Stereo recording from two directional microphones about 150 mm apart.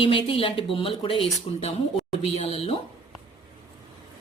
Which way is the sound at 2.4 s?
40° left (ahead or behind).